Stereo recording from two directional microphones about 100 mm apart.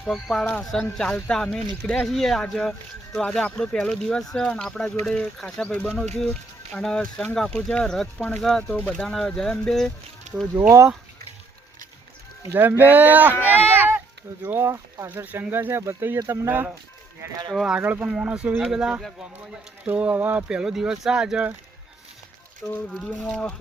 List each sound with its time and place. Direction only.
0.0 s speech: 5° left (ahead or behind)
10.5 s speech: 30° right (ahead or behind)
12.5 s speech: 20° right (ahead or behind)
13.7 s a sound: 20° right (ahead or behind)
14.4 s speech: 20° right (ahead or behind)
17.5 s speech: 5° right (ahead or behind)
17.7 s speech: 15° right (ahead or behind)
22.6 s speech: centre (ahead or behind)